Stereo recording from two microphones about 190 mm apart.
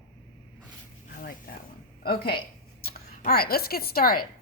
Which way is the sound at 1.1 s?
50° left (ahead or behind).